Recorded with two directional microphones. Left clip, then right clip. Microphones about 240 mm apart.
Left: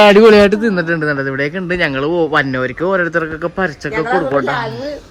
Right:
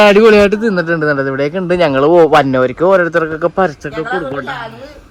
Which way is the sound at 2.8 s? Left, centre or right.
Centre.